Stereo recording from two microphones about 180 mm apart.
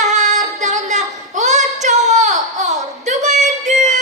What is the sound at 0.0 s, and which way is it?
Female singing, 40° right (ahead or behind).